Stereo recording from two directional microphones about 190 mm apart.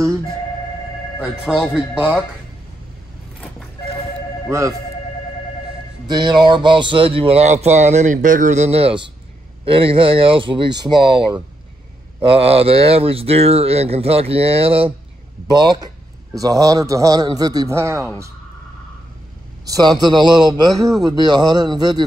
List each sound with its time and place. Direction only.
1.2 s a man's voice: 5° right (ahead or behind)
4.5 s speech: 15° right (ahead or behind)
6.0 s a man's voice: 20° right (ahead or behind)
19.6 s a man's voice: 20° right (ahead or behind)